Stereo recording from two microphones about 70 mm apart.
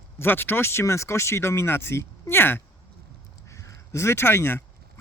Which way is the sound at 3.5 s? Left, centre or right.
Left.